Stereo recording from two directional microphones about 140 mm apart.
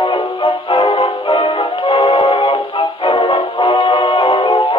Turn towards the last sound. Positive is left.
turn(degrees=30)  # may be behind; listen again after turning